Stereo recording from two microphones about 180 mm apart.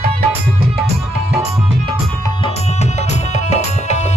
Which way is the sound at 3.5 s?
40° left (ahead or behind).